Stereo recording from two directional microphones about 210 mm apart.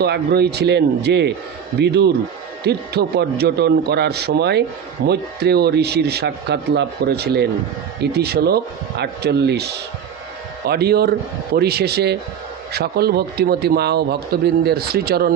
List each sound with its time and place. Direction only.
0.0 s speech: 50° right (ahead or behind)